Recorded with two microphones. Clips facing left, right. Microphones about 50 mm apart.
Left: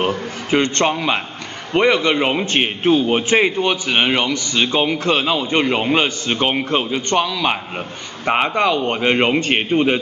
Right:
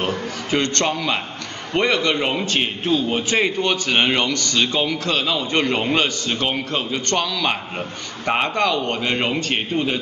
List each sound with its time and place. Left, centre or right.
0.0 s a man's voice: centre